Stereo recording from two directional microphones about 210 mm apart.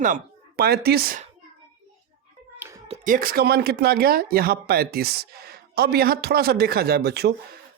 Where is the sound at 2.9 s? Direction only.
40° right (ahead or behind).